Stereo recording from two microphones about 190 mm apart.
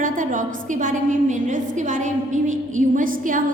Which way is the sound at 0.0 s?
45° right (ahead or behind).